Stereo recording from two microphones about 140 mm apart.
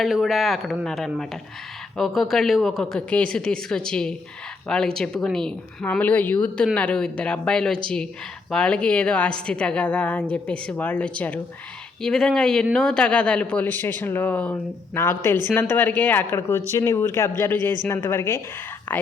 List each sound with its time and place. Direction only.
0.0 s a woman's voice: centre (ahead or behind); by 18.3 s 20° left (ahead or behind)